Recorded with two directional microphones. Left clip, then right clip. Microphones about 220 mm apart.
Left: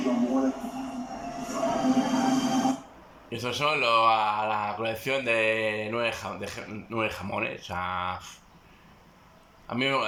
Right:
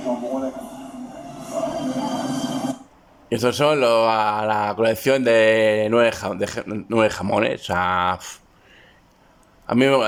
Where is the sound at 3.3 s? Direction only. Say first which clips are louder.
Right 9 dB; 50° right (ahead or behind).